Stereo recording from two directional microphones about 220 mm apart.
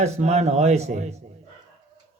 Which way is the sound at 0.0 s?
30° right (ahead or behind).